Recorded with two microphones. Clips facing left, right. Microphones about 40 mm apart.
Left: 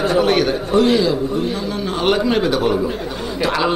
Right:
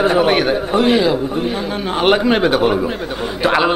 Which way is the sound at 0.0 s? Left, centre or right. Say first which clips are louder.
Right 2 dB; right.